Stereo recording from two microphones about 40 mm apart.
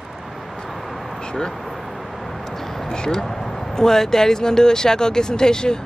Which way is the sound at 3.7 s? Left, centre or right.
Centre.